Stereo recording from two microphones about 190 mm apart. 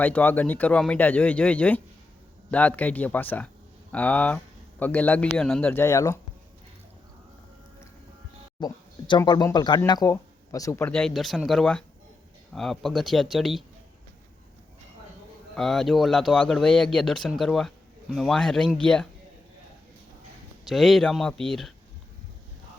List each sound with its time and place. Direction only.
0.0 s speech: 10° left (ahead or behind)
8.6 s speech: 25° left (ahead or behind); by 13.7 s centre (ahead or behind)
15.5 s speech: centre (ahead or behind)
20.7 s speech: centre (ahead or behind)